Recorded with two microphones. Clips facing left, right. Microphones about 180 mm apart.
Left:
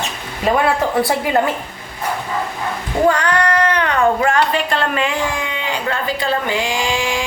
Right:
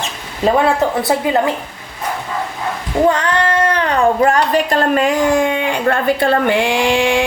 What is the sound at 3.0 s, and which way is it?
Speech, 25° right (ahead or behind).